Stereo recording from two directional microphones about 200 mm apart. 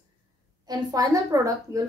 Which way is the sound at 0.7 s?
20° right (ahead or behind).